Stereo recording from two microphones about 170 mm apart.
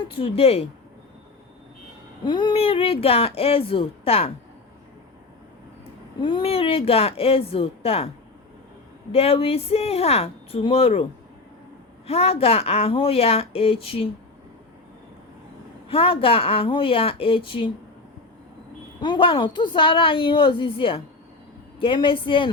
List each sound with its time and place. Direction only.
0.2 s speech: 35° left (ahead or behind)
2.2 s speech: 25° left (ahead or behind)
6.2 s speech: 30° left (ahead or behind)
9.1 s speech: 35° left (ahead or behind)
12.0 s speech: 35° left (ahead or behind)
15.9 s speech: 35° left (ahead or behind)
19.0 s a woman's voice: 25° left (ahead or behind)